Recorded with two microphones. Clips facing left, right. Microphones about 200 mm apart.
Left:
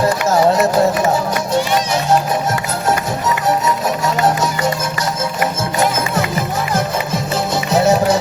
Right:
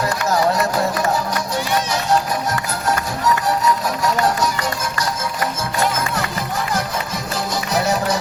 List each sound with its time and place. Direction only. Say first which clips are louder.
0.3 s music: left 4 dB; 25° left (ahead or behind)
4.0 s music: left 2 dB; 25° left (ahead or behind)
7.7 s music: left 7 dB; 25° left (ahead or behind)